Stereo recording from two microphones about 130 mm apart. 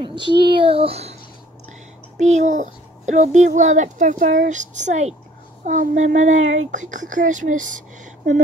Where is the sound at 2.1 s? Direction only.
65° right (ahead or behind).